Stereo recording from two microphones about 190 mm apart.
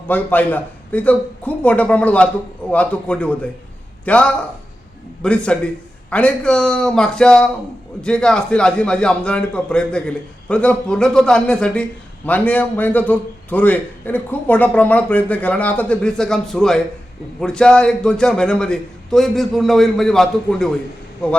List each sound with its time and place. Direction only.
0.1 s a man's voice: 10° left (ahead or behind)